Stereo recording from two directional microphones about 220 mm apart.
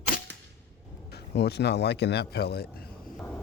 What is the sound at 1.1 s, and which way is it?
Speech, 50° left (ahead or behind).